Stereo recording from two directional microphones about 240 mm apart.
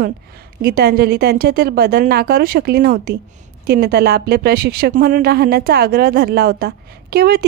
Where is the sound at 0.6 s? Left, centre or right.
Right.